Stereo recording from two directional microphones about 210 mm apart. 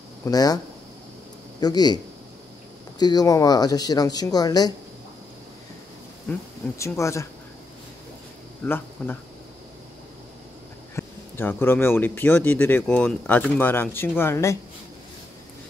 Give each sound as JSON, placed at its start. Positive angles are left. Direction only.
{"t": 0.2, "sound": "speech", "side_deg": 20}
{"t": 1.6, "sound": "speech", "side_deg": 20}
{"t": 3.0, "sound": "speech", "side_deg": 20}
{"t": 6.3, "sound": "speech", "side_deg": 10}
{"t": 8.6, "sound": "speech", "side_deg": 10}
{"t": 11.0, "sound": "speech", "side_deg": 10}